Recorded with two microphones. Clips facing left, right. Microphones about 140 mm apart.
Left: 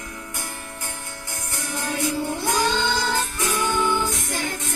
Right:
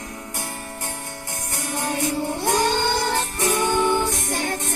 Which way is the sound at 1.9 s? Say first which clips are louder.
Even; 50° right (ahead or behind).